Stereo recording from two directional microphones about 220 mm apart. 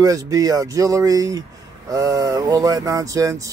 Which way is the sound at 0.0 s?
15° right (ahead or behind).